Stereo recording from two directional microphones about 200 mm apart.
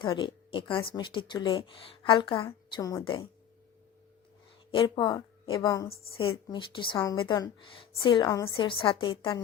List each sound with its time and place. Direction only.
0.0 s a woman's voice: 25° left (ahead or behind)
4.7 s a woman's voice: 25° left (ahead or behind)